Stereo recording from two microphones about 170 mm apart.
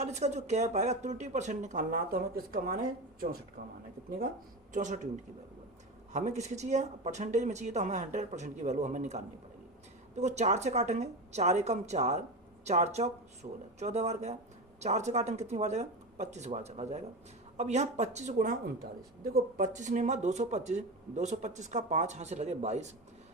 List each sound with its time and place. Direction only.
0.0 s speech: 40° right (ahead or behind); by 3.7 s 60° right (ahead or behind)
4.7 s speech: 45° right (ahead or behind)
6.1 s speech: 45° right (ahead or behind)